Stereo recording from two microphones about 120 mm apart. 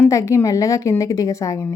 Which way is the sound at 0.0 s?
25° left (ahead or behind).